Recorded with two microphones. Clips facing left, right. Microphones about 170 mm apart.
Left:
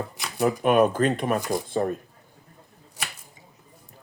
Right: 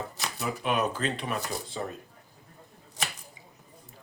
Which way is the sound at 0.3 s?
50° left (ahead or behind).